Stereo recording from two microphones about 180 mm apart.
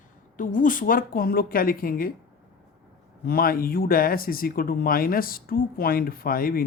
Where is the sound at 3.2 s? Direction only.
55° left (ahead or behind).